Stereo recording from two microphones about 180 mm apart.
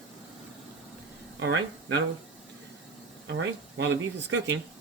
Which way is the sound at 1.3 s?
80° right.